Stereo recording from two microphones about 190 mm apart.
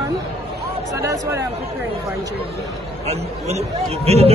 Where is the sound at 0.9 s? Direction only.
15° right (ahead or behind).